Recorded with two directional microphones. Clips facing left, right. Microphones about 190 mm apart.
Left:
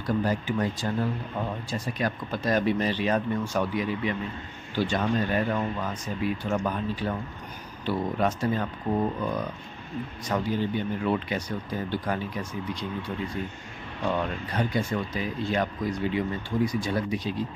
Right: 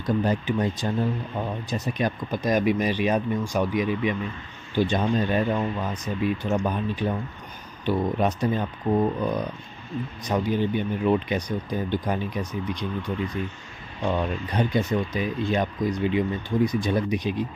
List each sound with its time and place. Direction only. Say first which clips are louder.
0.0 s speech: right 3 dB; 20° right (ahead or behind)
14.4 s speech: right 3 dB; 20° right (ahead or behind)